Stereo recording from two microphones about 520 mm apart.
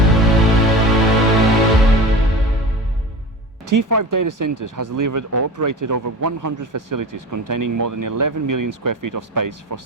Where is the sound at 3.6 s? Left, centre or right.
Right.